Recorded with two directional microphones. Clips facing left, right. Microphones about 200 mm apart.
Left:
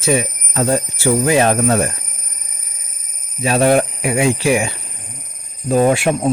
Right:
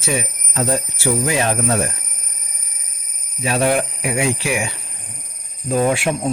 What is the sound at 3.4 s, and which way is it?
Speech, 40° left (ahead or behind).